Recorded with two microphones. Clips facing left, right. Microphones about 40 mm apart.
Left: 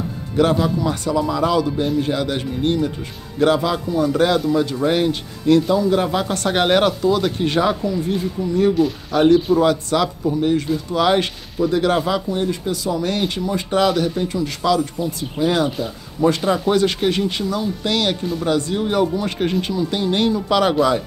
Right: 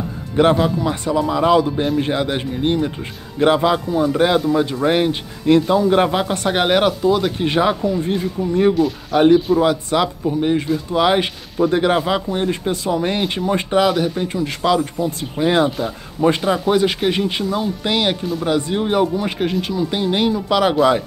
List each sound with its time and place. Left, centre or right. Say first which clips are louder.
0.6 s speech: right 1 dB; centre
7.9 s speech: right 2 dB; right
8.8 s speech: even; centre
9.1 s speech: right 1 dB; centre
11.6 s speech: right 2 dB; right
11.9 s speech: right 1 dB; centre
12.3 s speech: right 1 dB; right
13.3 s speech: right 3 dB; right
13.7 s speech: even; centre
14.2 s speech: right 1 dB; right
14.8 s speech: right 1 dB; right
15.4 s speech: right 2 dB; right
16.4 s speech: right 1 dB; centre